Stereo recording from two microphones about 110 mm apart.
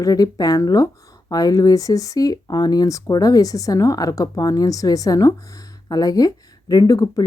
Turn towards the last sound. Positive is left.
turn(degrees=35)  # may be behind; listen again after turning